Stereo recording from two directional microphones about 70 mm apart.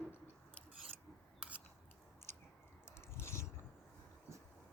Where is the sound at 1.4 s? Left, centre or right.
Centre.